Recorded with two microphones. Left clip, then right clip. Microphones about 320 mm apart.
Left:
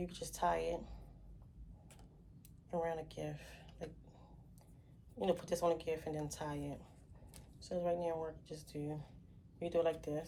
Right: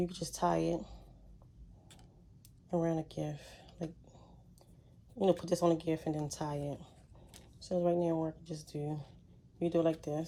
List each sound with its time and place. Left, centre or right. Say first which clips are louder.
0.0 s speech: right 4 dB; right
2.7 s speech: right 5 dB; right
5.1 s speech: right 6 dB; right
7.7 s speech: right 6 dB; right
7.9 s speech: right 6 dB; right